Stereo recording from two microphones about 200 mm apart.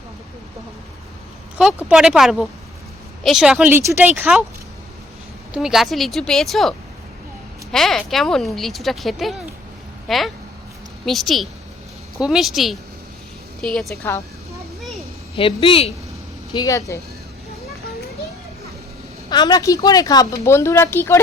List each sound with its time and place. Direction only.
1.5 s speech: 5° right (ahead or behind)
5.5 s speech: centre (ahead or behind)
15.4 s speech: 25° left (ahead or behind)
19.3 s speech: 20° left (ahead or behind)